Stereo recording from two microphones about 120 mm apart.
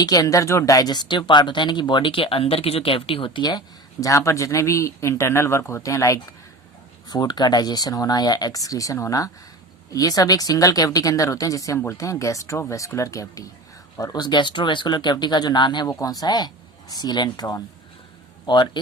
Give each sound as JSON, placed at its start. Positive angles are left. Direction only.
{"t": 0.0, "sound": "speech", "side_deg": 30}
{"t": 4.0, "sound": "speech", "side_deg": 25}